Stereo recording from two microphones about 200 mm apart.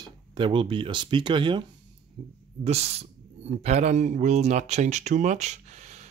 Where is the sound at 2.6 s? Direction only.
30° right (ahead or behind).